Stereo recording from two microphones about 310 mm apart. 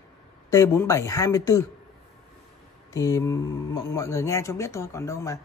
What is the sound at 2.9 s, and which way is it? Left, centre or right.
A man's voice, centre.